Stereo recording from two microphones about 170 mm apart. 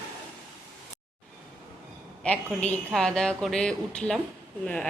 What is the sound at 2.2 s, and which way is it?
A woman's voice, 5° left (ahead or behind).